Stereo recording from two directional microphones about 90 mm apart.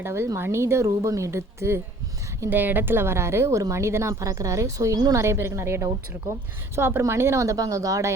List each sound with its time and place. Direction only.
0.0 s a woman's voice: 30° right (ahead or behind)
5.2 s a woman's voice: 30° right (ahead or behind)